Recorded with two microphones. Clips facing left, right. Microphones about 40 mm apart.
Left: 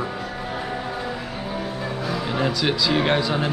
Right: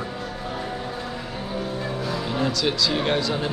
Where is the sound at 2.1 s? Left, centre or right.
Centre.